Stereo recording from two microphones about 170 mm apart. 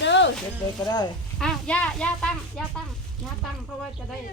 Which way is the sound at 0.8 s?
25° left (ahead or behind).